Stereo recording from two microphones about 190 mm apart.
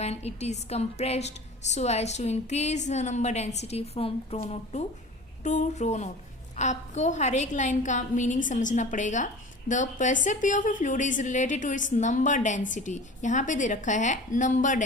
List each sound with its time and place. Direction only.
0.0 s a woman's voice: 35° left (ahead or behind)
5.4 s a woman's voice: 40° left (ahead or behind)